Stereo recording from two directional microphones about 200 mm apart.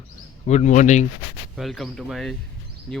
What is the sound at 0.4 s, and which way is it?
Speech, 35° left (ahead or behind).